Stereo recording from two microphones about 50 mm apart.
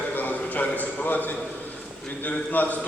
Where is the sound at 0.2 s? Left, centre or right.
Left.